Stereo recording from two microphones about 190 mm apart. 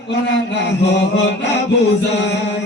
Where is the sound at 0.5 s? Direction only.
65° left (ahead or behind).